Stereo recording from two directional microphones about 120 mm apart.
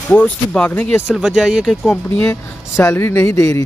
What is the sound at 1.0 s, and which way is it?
Speech, 5° right (ahead or behind).